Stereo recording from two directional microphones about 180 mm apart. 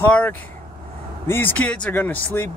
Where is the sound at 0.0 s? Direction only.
10° left (ahead or behind).